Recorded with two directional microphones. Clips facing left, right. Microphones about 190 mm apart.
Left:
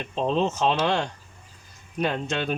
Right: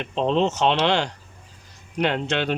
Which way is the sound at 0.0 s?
90° right.